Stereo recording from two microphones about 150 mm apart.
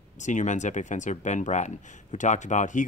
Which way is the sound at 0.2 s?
55° left (ahead or behind).